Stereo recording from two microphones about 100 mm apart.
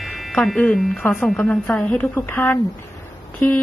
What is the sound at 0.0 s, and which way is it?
Music, centre (ahead or behind).